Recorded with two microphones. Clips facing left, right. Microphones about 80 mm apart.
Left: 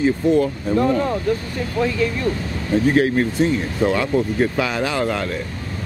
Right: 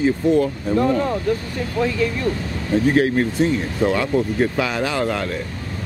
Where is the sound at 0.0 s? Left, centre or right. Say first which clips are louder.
Even; left.